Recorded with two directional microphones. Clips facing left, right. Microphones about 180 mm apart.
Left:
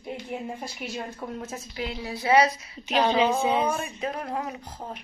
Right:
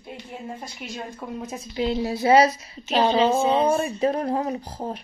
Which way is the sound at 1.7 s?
30° right (ahead or behind).